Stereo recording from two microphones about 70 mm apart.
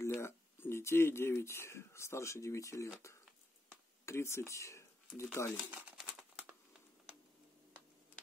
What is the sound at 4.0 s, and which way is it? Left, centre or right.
Speech, left.